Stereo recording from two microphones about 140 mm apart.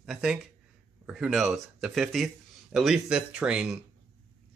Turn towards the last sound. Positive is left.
turn(degrees=-5)  # may be behind; listen again after turning